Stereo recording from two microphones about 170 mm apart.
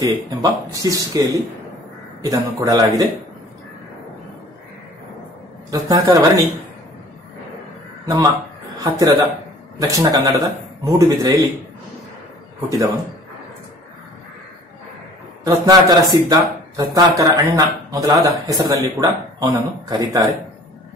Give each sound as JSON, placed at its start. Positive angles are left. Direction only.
{"t": 0.4, "sound": "speech", "side_deg": -20}
{"t": 2.2, "sound": "speech", "side_deg": -20}
{"t": 5.7, "sound": "speech", "side_deg": -20}
{"t": 8.0, "sound": "a man's voice", "side_deg": -20}
{"t": 12.6, "sound": "speech", "side_deg": -20}
{"t": 15.4, "sound": "speech", "side_deg": -25}